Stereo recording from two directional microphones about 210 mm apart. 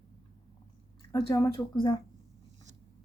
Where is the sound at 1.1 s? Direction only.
15° left (ahead or behind).